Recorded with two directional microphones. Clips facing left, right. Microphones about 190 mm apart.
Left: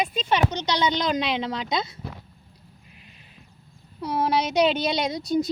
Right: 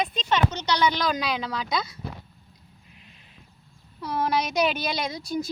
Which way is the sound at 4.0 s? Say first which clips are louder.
Left 2 dB; 10° left (ahead or behind).